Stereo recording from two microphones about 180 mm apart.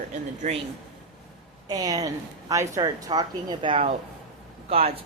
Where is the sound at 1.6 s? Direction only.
20° right (ahead or behind).